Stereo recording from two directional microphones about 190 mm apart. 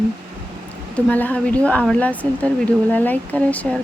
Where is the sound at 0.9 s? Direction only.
10° left (ahead or behind).